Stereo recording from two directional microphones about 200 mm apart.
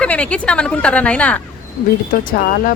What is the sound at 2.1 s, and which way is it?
Speech, 45° left (ahead or behind).